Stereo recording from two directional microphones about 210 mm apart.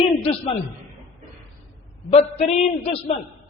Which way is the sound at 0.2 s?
25° left (ahead or behind).